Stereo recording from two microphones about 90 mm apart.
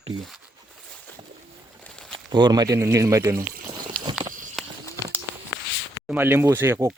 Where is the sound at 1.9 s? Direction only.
5° left (ahead or behind).